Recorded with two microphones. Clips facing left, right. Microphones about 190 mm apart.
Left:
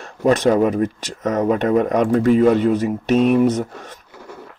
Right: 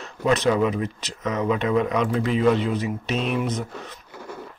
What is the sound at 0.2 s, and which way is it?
Speech, 45° left (ahead or behind).